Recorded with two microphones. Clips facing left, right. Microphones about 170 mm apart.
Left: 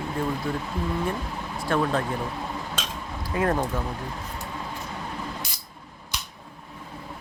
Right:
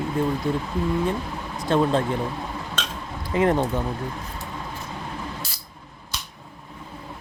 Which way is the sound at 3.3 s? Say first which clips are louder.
Right 4 dB; 20° right (ahead or behind).